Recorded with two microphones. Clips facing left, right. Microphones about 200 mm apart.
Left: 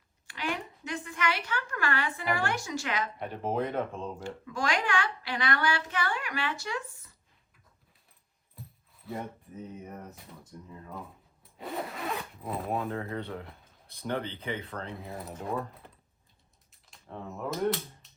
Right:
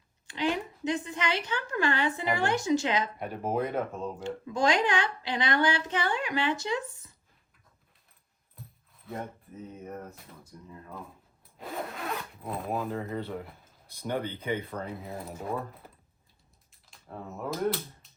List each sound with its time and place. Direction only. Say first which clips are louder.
0.3 s a woman's voice: right 5 dB; 20° right (ahead or behind)
3.2 s speech: right 1 dB; 5° right (ahead or behind)
4.2 s a woman's voice: right 8 dB; 20° right (ahead or behind)
8.6 s a sound: left 1 dB; centre (ahead or behind)
9.1 s speech: even; centre (ahead or behind)
14.5 s speech: right 5 dB; 15° right (ahead or behind)
14.8 s speech: right 2 dB; centre (ahead or behind)
16.9 s speech: even; centre (ahead or behind)